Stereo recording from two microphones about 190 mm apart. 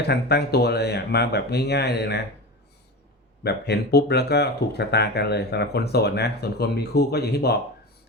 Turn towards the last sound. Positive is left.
turn(degrees=55)  # may be behind; listen again after turning